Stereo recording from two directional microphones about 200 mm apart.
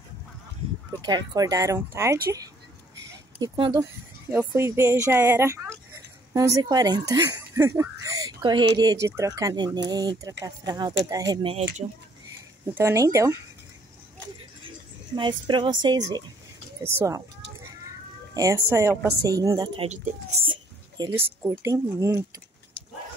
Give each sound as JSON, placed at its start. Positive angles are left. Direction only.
{"t": 1.0, "sound": "a woman's voice", "side_deg": -20}
{"t": 3.3, "sound": "speech", "side_deg": -20}
{"t": 4.3, "sound": "a woman's voice", "side_deg": -10}
{"t": 12.7, "sound": "a woman's voice", "side_deg": -15}
{"t": 15.1, "sound": "a woman's voice", "side_deg": -25}
{"t": 18.3, "sound": "a woman's voice", "side_deg": -15}
{"t": 20.4, "sound": "a sound", "side_deg": -25}
{"t": 21.4, "sound": "a woman's voice", "side_deg": -15}